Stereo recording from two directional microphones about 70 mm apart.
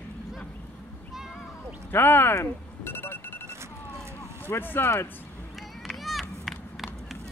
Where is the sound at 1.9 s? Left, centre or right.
Left.